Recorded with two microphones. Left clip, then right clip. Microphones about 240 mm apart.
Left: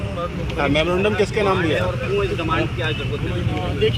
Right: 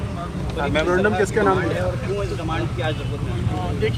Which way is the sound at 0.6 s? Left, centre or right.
Left.